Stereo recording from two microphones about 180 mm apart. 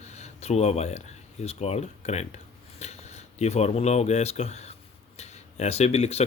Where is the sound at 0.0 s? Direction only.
35° left (ahead or behind).